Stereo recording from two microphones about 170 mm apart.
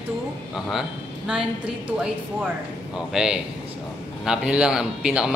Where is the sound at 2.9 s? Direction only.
5° right (ahead or behind).